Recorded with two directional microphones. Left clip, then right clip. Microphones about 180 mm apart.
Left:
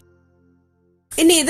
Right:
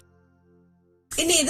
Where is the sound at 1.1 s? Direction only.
45° left (ahead or behind).